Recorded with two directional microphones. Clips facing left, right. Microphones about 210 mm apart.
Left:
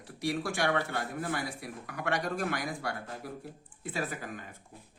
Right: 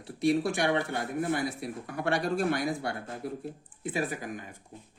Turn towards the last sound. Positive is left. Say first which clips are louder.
# right 4 dB
turn(degrees=-15)  # may be behind; listen again after turning